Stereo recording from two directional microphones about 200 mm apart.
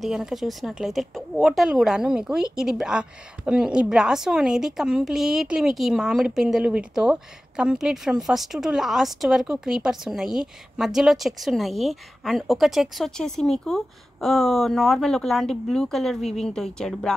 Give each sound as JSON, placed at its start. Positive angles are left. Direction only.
{"t": 0.0, "sound": "speech", "side_deg": 0}